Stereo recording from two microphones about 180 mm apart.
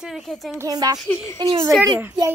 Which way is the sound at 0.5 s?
20° right (ahead or behind).